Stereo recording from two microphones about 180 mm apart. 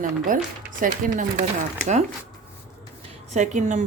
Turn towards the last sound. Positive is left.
turn(degrees=-45)  # may be behind; listen again after turning